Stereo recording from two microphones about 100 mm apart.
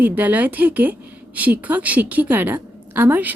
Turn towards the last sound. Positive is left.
turn(degrees=-20)  # may be behind; listen again after turning